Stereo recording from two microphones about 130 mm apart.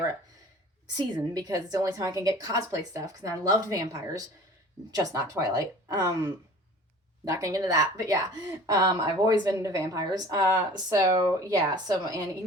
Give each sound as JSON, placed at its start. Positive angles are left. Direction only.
{"t": 0.9, "sound": "a woman's voice", "side_deg": -30}